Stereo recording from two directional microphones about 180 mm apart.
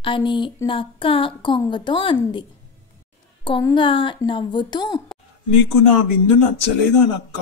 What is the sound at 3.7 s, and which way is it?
A woman's voice, 30° left (ahead or behind).